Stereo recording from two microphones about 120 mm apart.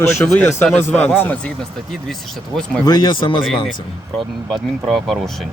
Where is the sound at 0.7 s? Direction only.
15° left (ahead or behind).